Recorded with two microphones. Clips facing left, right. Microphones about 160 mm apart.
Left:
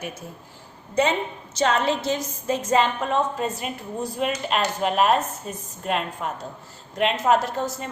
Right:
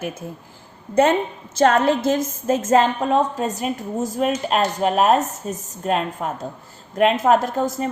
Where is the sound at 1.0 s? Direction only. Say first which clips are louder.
Right 5 dB; 50° right (ahead or behind).